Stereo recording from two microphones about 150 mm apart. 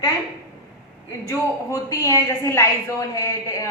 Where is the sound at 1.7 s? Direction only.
25° left (ahead or behind).